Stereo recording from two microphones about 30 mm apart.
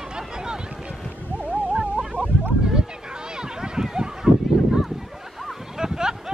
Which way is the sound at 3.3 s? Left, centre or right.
Right.